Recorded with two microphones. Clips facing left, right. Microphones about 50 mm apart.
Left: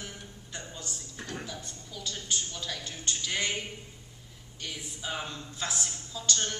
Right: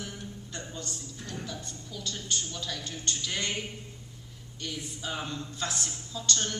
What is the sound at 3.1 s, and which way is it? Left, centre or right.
Speech, centre.